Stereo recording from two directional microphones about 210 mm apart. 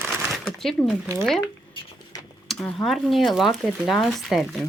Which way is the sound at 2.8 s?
Centre (ahead or behind).